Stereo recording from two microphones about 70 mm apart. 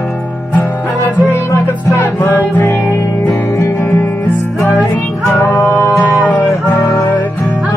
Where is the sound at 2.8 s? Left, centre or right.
Left.